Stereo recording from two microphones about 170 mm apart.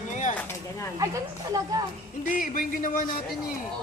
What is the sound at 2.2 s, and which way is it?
Speech, 55° left (ahead or behind).